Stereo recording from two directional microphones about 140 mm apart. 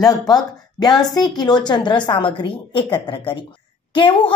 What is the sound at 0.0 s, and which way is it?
Speech, 30° left (ahead or behind).